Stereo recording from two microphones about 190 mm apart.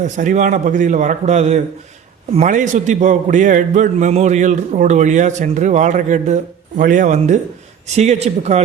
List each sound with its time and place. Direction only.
0.0 s a man's voice: 40° right (ahead or behind)